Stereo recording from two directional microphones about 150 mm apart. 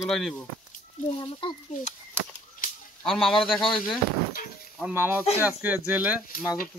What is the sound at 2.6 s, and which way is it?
Cap gun, 65° left (ahead or behind).